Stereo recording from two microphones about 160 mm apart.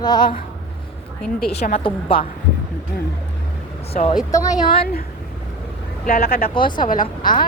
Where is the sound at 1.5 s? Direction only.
40° left (ahead or behind).